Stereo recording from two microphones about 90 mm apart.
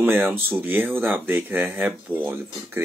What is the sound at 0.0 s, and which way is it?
Speech, 20° right (ahead or behind).